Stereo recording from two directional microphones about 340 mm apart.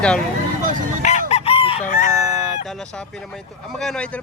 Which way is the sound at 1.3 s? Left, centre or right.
Centre.